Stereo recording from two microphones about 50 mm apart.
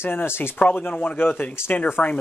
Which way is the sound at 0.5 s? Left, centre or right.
Left.